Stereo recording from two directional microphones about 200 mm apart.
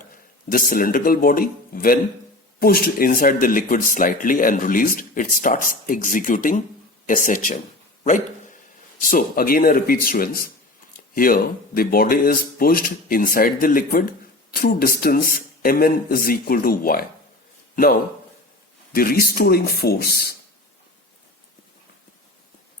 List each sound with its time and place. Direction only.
0.5 s speech: 45° left (ahead or behind)
8.0 s a sound: 40° left (ahead or behind)
9.0 s speech: 45° left (ahead or behind)
18.9 s speech: 50° left (ahead or behind)